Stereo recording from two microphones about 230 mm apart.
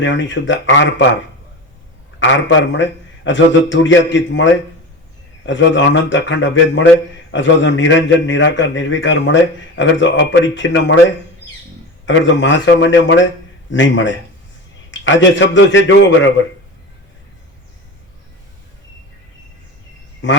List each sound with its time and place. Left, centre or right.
0.0 s a man's voice: left
2.1 s a man's voice: left
12.0 s a man's voice: left
20.2 s a man's voice: left